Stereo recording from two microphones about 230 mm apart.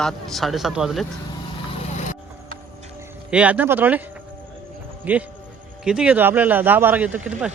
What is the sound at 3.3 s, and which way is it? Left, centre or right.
Speech, centre.